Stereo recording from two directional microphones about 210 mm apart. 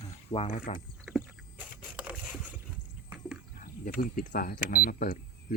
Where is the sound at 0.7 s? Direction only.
30° left (ahead or behind).